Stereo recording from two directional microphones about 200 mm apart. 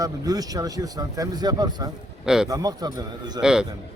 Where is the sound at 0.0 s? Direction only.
20° right (ahead or behind).